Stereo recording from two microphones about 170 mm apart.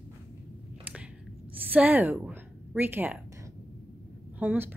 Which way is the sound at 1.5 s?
10° right (ahead or behind).